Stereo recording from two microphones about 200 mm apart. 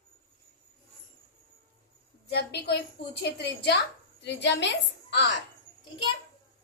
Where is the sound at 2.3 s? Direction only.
55° left (ahead or behind).